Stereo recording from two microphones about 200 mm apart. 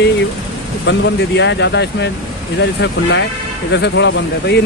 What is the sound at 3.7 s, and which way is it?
Speech, 65° left (ahead or behind).